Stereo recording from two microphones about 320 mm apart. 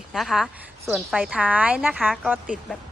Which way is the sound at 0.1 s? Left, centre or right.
Centre.